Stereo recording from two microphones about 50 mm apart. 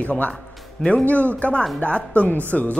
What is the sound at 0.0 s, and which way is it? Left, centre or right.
A man's voice, left.